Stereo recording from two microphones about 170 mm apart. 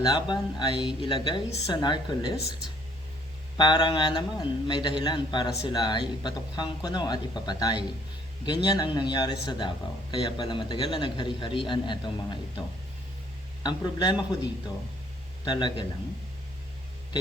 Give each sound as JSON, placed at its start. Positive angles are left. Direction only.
{"t": 0.0, "sound": "a man's voice", "side_deg": 25}
{"t": 3.6, "sound": "a man's voice", "side_deg": 25}
{"t": 15.4, "sound": "a man's voice", "side_deg": 25}